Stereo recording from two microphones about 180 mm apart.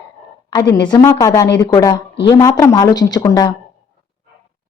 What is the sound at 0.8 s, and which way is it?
A woman's voice, 20° left (ahead or behind).